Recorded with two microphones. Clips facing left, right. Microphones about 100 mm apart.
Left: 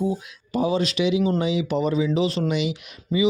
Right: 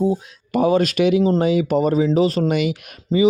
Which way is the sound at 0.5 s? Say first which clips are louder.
Right 6 dB; 55° right (ahead or behind).